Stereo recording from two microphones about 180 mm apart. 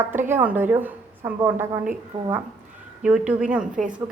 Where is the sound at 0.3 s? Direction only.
10° right (ahead or behind).